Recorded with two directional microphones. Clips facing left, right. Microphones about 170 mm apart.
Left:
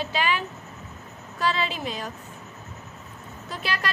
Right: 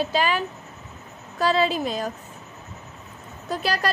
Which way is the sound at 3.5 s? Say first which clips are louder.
Right 6 dB; 40° right (ahead or behind).